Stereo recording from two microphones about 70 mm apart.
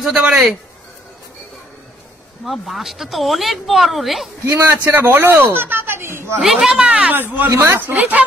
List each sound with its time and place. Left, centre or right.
0.0 s speech: centre
2.4 s speech: centre
4.5 s speech: right
6.4 s speech: centre
6.9 s speech: centre
7.2 s speech: right
7.9 s speech: right